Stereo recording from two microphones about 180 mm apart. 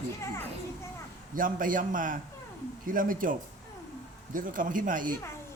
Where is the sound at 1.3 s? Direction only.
50° right (ahead or behind).